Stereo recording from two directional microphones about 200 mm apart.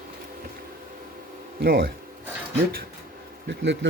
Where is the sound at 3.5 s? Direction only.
65° right (ahead or behind).